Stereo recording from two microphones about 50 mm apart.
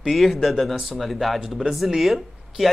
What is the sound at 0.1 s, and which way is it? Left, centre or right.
Speech, centre.